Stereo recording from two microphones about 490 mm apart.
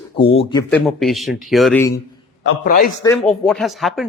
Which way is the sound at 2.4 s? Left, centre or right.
Centre.